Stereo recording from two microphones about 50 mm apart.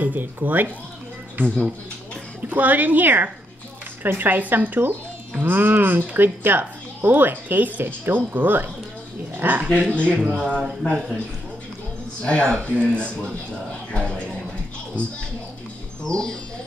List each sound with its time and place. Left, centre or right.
0.0 s speech: right
2.5 s speech: right
9.7 s speech: left
10.3 s speech: centre
12.2 s speech: left
16.1 s speech: centre